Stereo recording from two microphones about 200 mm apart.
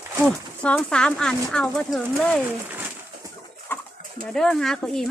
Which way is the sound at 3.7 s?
10° left (ahead or behind).